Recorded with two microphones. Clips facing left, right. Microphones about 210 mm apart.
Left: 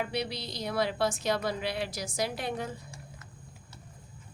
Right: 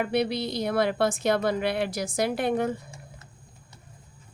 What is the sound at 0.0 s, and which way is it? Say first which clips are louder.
A woman's voice: right 8 dB; 55° right (ahead or behind).